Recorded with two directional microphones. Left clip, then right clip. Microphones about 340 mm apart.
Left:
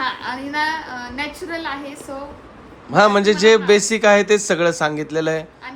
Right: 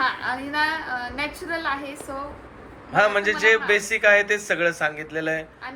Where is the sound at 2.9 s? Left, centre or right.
Centre.